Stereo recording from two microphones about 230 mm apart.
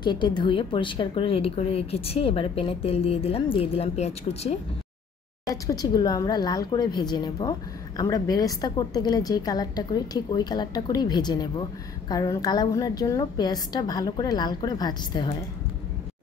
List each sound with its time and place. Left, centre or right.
0.0 s a woman's voice: centre
5.5 s a woman's voice: centre